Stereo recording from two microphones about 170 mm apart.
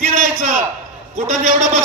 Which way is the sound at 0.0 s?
45° right (ahead or behind).